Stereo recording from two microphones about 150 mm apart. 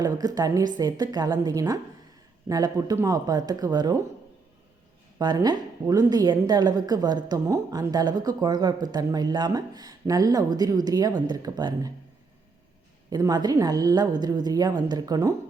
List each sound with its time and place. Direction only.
0.0 s a woman's voice: 25° right (ahead or behind)
5.2 s a woman's voice: 25° right (ahead or behind)
13.1 s a woman's voice: 25° right (ahead or behind)